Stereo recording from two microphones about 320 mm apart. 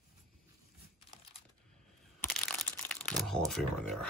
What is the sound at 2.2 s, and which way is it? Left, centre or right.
Crumpling, centre.